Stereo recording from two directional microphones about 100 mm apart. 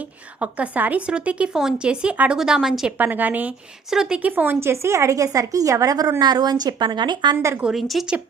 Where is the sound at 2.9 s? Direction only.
20° right (ahead or behind); by 7.4 s 45° right (ahead or behind).